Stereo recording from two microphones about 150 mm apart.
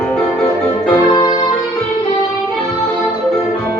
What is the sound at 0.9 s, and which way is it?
Music, 30° left (ahead or behind).